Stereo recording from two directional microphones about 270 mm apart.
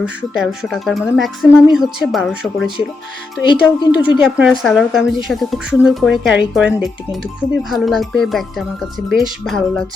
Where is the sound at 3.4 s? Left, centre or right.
Centre.